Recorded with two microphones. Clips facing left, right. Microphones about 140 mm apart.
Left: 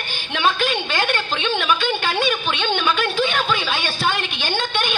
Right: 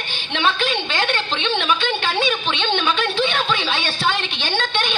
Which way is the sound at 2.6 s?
10° left (ahead or behind).